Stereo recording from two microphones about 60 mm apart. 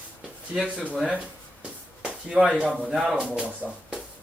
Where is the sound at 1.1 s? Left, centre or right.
Right.